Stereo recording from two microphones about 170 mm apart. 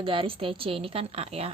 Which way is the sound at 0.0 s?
30° right (ahead or behind).